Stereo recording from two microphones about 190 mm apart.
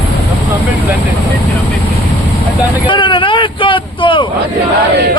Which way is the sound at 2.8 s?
25° left (ahead or behind).